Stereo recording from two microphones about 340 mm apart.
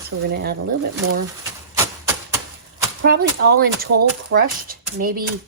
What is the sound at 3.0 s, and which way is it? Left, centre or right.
Speech, right.